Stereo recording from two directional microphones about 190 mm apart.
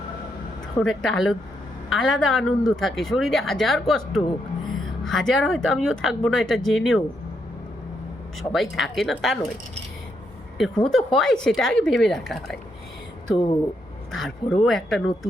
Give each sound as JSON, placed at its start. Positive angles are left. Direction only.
{"t": 0.8, "sound": "a woman's voice", "side_deg": 0}
{"t": 8.4, "sound": "a woman's voice", "side_deg": 0}
{"t": 10.6, "sound": "a woman's voice", "side_deg": 5}
{"t": 13.3, "sound": "speech", "side_deg": 25}
{"t": 14.1, "sound": "a woman's voice", "side_deg": 0}